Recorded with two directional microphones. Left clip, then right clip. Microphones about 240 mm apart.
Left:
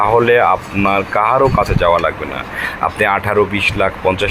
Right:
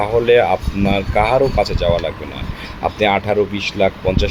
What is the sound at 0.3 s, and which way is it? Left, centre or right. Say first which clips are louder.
Speech: left 1 dB; centre.